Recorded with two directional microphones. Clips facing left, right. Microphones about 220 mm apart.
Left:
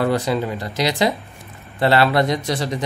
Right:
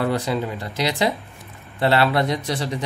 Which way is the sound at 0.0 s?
90° left.